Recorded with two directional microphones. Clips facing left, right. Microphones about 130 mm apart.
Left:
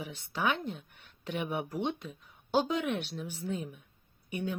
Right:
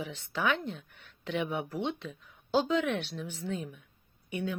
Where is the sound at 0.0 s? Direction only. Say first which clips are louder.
Right 1 dB; 15° left (ahead or behind).